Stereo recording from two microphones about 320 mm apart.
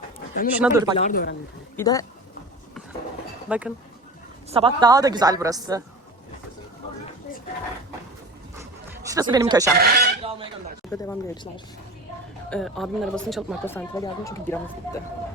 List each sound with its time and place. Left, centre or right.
0.6 s a woman's voice: centre
0.9 s speech: left
1.7 s speech: centre
3.5 s a woman's voice: centre
8.5 s a sound: centre
9.7 s speech: right
10.9 s speech: centre